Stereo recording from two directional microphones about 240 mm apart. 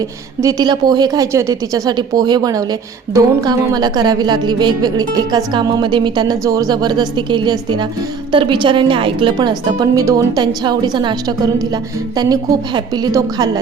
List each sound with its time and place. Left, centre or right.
0.4 s a woman's voice: centre